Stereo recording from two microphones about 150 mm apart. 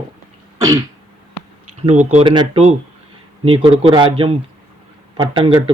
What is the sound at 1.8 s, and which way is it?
Speech, 50° right (ahead or behind).